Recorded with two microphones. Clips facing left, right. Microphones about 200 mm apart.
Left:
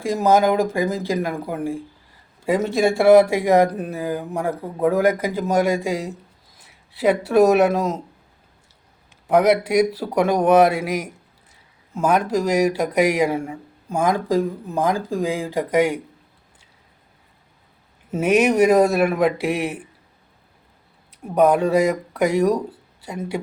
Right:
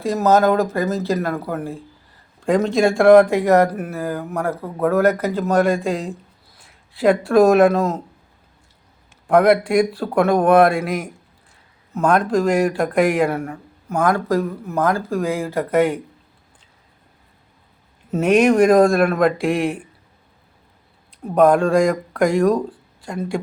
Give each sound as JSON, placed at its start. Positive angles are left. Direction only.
{"t": 0.0, "sound": "speech", "side_deg": 15}
{"t": 7.3, "sound": "speech", "side_deg": 5}
{"t": 9.2, "sound": "speech", "side_deg": 5}
{"t": 18.1, "sound": "speech", "side_deg": 5}
{"t": 21.3, "sound": "speech", "side_deg": 5}